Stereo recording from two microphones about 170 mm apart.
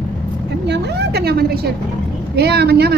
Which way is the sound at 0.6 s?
80° right.